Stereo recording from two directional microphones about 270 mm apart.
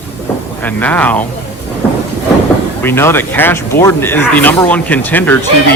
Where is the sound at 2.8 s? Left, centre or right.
Centre.